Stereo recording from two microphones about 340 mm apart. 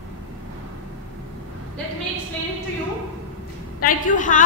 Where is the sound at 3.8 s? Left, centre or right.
Left.